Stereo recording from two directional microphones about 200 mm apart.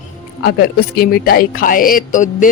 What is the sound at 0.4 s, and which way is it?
A woman's voice, 50° left (ahead or behind).